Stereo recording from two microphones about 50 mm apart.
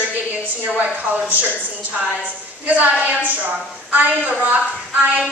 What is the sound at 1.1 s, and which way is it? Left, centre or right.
Speech, right.